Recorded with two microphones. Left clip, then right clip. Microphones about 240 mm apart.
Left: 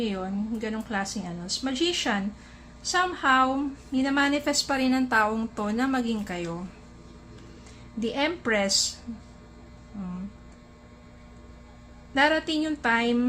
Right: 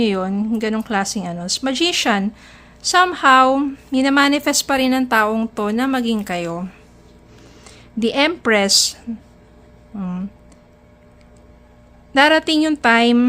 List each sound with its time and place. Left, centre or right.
0.0 s a woman's voice: right
7.6 s speech: right
9.9 s a woman's voice: right
12.1 s a woman's voice: right